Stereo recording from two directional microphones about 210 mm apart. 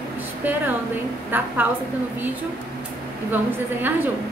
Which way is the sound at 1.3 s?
10° right (ahead or behind).